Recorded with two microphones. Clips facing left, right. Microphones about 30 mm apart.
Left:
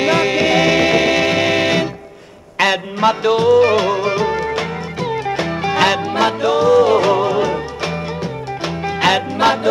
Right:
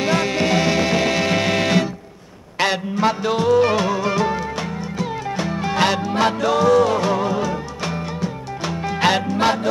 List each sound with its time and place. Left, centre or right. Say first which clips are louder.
0.0 s music: left 5 dB; left
3.0 s music: left 5 dB; left
5.8 s music: left 3 dB; left
6.9 s music: left 6 dB; left
8.8 s music: left 3 dB; centre